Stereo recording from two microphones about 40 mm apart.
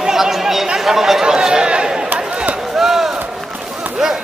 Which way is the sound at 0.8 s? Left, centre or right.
Centre.